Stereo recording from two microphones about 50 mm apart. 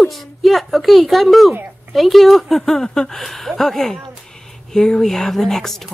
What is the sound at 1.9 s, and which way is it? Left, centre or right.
Speech, centre.